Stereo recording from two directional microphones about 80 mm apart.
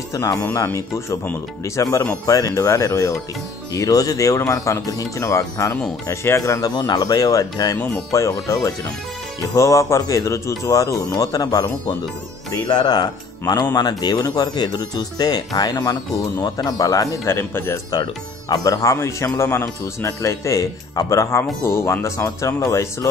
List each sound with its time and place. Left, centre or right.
0.1 s speech: left
6.7 s speech: left
12.6 s speech: left
17.3 s speech: left
18.5 s speech: left